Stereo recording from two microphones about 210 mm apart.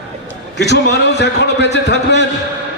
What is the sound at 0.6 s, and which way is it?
A man's voice, 55° left (ahead or behind).